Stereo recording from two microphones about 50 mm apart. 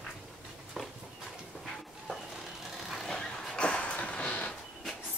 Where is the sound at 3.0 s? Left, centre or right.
Centre.